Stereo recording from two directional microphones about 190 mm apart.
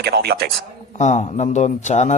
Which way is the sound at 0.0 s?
60° right (ahead or behind).